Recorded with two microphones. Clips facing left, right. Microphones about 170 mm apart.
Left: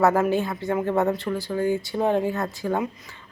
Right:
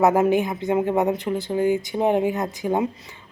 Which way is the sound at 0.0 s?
20° right (ahead or behind).